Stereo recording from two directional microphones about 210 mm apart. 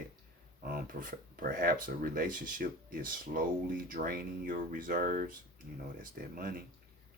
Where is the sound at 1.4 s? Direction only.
40° right (ahead or behind).